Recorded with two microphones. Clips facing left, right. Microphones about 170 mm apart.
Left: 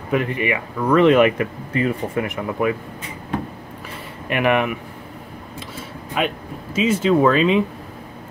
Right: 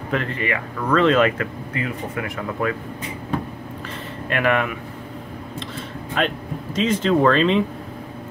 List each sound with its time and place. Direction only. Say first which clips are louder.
0.1 s speech: left 4 dB; 15° left (ahead or behind)
4.3 s speech: left 2 dB; 15° left (ahead or behind)
6.1 s speech: even; 10° left (ahead or behind)